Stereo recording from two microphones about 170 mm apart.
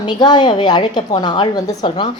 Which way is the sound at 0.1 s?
25° left (ahead or behind).